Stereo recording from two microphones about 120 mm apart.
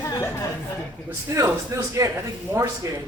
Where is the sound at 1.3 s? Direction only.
25° right (ahead or behind).